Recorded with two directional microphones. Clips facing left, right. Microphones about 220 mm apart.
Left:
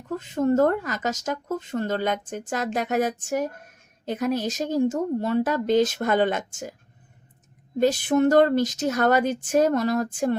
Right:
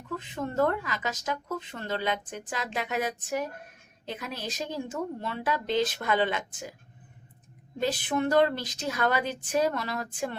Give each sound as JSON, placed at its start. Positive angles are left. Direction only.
{"t": 0.2, "sound": "speech", "side_deg": 45}
{"t": 7.8, "sound": "speech", "side_deg": 45}